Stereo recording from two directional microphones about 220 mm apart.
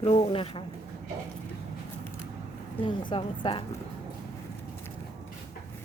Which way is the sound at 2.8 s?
20° left (ahead or behind).